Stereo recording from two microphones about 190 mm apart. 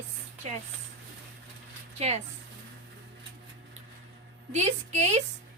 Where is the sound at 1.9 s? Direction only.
35° right (ahead or behind).